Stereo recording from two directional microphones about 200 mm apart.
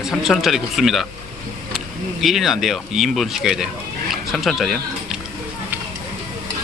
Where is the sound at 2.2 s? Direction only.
Centre (ahead or behind).